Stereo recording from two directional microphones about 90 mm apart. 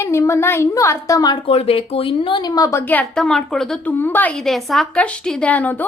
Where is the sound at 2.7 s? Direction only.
25° left (ahead or behind).